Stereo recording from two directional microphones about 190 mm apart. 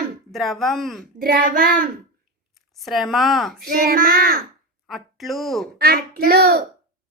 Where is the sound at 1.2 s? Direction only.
50° right (ahead or behind).